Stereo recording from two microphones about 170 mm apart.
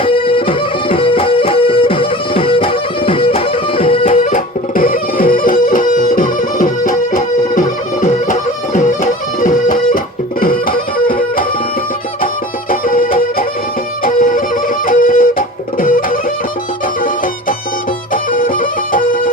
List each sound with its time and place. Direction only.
0.0 s music: 30° left (ahead or behind)
4.1 s music: 50° left (ahead or behind)
12.8 s music: 55° left (ahead or behind)
18.1 s music: 55° left (ahead or behind)